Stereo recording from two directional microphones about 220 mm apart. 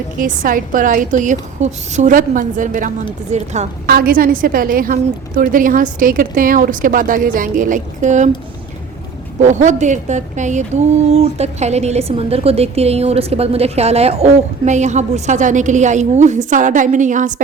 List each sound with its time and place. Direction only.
0.2 s a woman's voice: 40° right (ahead or behind)
3.8 s a woman's voice: 40° right (ahead or behind)
9.4 s a woman's voice: 35° right (ahead or behind)